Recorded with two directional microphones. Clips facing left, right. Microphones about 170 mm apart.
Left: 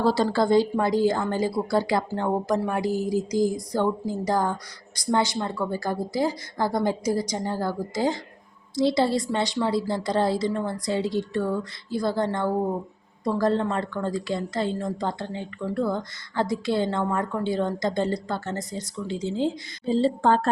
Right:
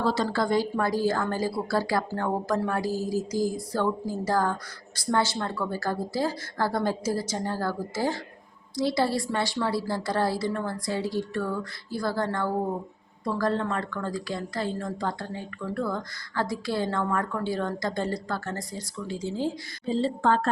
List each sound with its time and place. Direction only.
0.0 s a woman's voice: 30° left (ahead or behind)